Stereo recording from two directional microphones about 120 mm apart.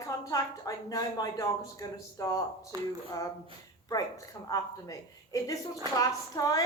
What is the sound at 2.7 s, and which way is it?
Speech, 30° right (ahead or behind).